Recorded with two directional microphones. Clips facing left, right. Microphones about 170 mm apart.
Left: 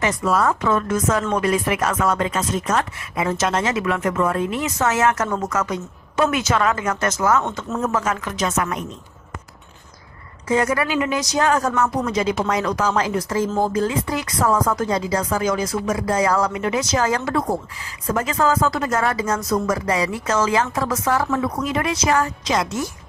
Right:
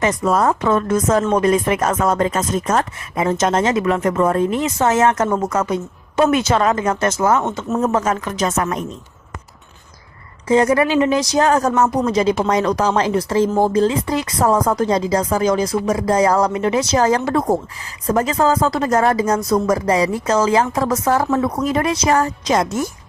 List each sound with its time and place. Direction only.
0.0 s speech: 40° right (ahead or behind)
7.9 s speech: 35° right (ahead or behind)
10.5 s speech: 35° right (ahead or behind)